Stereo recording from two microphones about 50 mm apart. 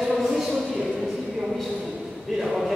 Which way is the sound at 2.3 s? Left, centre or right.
Centre.